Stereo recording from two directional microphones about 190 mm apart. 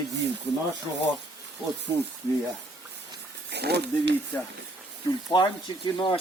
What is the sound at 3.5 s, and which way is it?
Speech, 60° right (ahead or behind).